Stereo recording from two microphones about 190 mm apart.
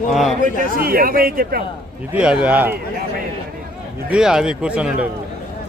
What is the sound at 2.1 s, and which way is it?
Speech, 5° right (ahead or behind).